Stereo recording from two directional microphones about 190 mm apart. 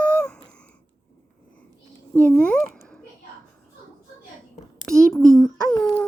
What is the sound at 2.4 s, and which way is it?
Babbling, 5° left (ahead or behind).